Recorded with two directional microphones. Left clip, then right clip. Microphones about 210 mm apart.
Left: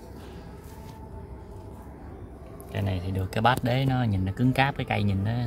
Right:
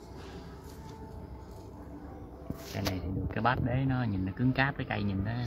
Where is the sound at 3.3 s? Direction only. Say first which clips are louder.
Left 7 dB; 35° left (ahead or behind).